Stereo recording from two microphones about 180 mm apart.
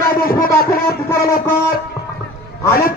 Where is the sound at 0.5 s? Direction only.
15° left (ahead or behind).